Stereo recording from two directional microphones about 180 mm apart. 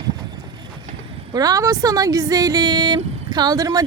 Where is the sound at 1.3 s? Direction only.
20° right (ahead or behind).